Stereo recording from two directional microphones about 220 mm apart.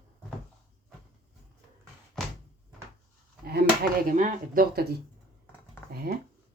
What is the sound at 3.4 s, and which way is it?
Speech, 45° right (ahead or behind).